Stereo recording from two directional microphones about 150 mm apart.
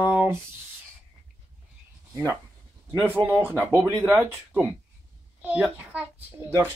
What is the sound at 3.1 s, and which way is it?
Speech, 15° right (ahead or behind).